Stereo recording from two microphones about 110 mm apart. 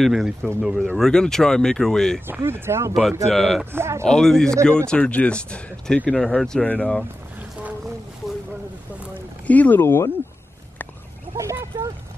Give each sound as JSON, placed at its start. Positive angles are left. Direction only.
{"t": 0.0, "sound": "speech", "side_deg": 0}
{"t": 2.2, "sound": "speech", "side_deg": -20}
{"t": 2.9, "sound": "speech", "side_deg": 0}
{"t": 3.7, "sound": "speech", "side_deg": -25}
{"t": 4.0, "sound": "speech", "side_deg": 5}
{"t": 9.5, "sound": "speech", "side_deg": 15}
{"t": 11.3, "sound": "a sound", "side_deg": -25}